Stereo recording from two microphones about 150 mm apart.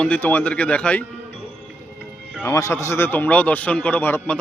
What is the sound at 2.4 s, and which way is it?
Speech, 20° left (ahead or behind).